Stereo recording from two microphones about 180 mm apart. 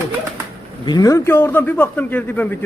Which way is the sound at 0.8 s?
20° left (ahead or behind).